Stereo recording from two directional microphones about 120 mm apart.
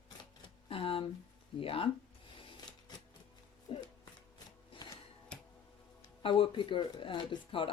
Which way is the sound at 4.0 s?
35° left (ahead or behind).